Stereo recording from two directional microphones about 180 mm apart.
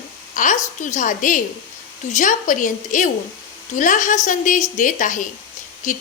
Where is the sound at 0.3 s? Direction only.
45° left (ahead or behind).